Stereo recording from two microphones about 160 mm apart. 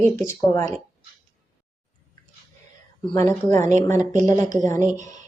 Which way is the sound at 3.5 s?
45° right (ahead or behind).